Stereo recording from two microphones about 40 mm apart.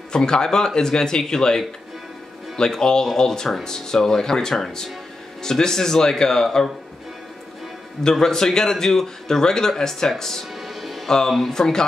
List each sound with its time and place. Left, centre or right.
0.1 s a man's voice: centre
8.0 s a man's voice: centre
10.6 s music: centre
11.1 s a man's voice: centre